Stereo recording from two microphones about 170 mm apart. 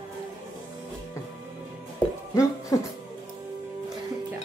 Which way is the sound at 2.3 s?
20° left (ahead or behind).